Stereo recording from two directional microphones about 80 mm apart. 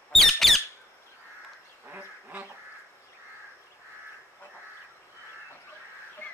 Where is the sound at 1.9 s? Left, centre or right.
Right.